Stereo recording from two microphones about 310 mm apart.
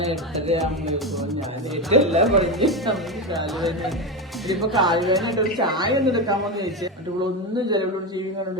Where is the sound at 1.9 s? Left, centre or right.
Right.